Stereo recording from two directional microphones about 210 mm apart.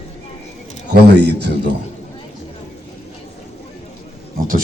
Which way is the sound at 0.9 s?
50° right (ahead or behind).